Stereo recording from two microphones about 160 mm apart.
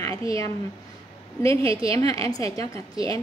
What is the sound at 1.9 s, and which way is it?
Speech, 20° left (ahead or behind).